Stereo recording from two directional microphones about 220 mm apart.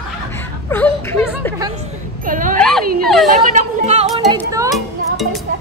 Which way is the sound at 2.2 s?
40° right (ahead or behind).